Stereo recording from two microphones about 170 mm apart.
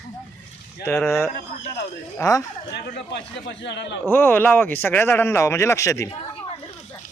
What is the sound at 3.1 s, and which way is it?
Speech, 85° left.